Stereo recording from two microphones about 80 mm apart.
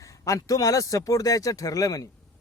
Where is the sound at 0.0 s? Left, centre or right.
Left.